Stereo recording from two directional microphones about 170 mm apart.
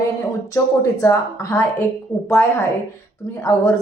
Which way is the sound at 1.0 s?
20° left (ahead or behind).